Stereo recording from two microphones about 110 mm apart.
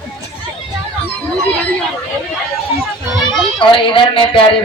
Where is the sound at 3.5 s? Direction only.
50° left (ahead or behind).